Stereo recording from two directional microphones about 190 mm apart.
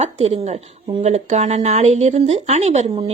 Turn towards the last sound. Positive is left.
turn(degrees=-35)  # may be behind; listen again after turning